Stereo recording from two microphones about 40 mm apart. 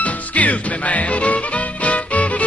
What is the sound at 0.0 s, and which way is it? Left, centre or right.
Music, left.